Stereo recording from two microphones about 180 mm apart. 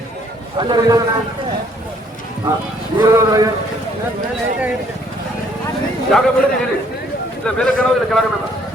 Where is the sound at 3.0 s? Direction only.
20° right (ahead or behind).